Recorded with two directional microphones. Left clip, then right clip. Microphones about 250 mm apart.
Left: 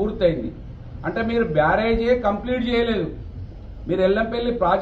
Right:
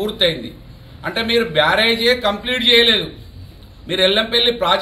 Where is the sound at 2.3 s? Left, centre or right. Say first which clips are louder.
Right 7 dB; centre.